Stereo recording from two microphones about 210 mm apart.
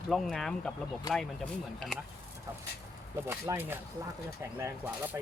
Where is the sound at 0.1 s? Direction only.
Centre (ahead or behind).